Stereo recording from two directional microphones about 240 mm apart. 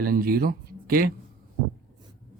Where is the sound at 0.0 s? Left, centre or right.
Right.